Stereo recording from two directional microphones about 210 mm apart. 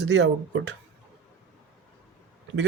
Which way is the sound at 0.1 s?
55° right (ahead or behind).